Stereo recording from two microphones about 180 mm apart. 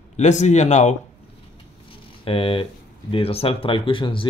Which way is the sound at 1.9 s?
30° left (ahead or behind).